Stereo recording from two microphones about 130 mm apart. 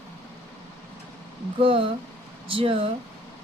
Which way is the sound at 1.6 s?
45° right (ahead or behind).